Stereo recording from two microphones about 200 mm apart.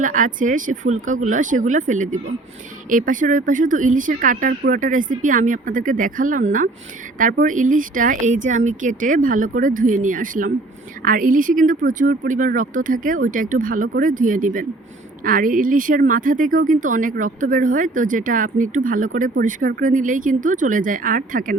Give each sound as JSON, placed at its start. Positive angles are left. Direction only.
{"t": 0.0, "sound": "speech", "side_deg": -40}